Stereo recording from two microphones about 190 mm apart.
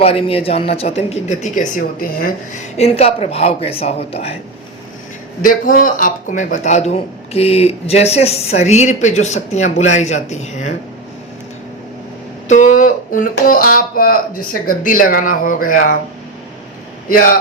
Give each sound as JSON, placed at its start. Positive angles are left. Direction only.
{"t": 0.0, "sound": "a man's voice", "side_deg": 30}
{"t": 2.7, "sound": "a man's voice", "side_deg": 35}
{"t": 5.4, "sound": "a man's voice", "side_deg": 45}
{"t": 12.5, "sound": "speech", "side_deg": 40}
{"t": 17.1, "sound": "speech", "side_deg": 50}